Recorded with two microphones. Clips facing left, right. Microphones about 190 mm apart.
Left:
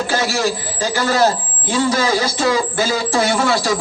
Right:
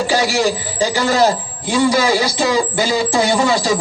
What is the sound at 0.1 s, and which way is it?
A man's voice, 15° right (ahead or behind).